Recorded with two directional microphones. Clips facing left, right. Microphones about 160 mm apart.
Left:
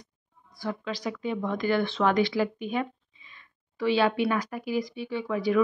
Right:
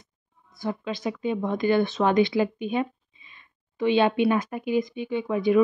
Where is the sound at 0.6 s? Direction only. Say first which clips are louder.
Right 3 dB; 20° right (ahead or behind).